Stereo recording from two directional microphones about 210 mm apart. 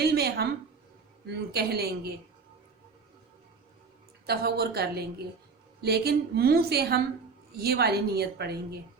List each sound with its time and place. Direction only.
0.0 s a sound: 50° right (ahead or behind)
1.3 s a woman's voice: 50° right (ahead or behind)
4.3 s a woman's voice: 50° right (ahead or behind)